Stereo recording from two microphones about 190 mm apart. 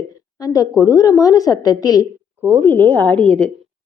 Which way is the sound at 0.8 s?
20° left (ahead or behind).